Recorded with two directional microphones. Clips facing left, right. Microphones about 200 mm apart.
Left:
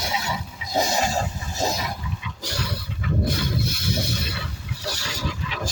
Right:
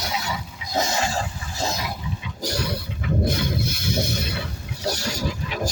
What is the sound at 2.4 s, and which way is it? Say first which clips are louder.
Roaring cats: right 6 dB; 40° right (ahead or behind).